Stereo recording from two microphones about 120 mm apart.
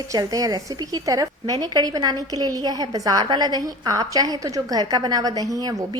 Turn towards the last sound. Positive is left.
turn(degrees=-30)  # may be behind; listen again after turning